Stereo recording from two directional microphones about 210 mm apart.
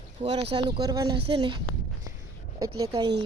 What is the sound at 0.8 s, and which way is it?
Speech, 20° right (ahead or behind).